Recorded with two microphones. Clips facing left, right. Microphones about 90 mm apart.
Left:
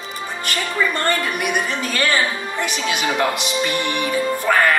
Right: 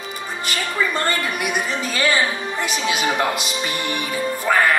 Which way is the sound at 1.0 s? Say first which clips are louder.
Left 2 dB; centre (ahead or behind).